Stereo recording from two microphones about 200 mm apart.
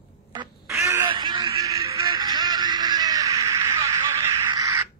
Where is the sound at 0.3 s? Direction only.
20° right (ahead or behind).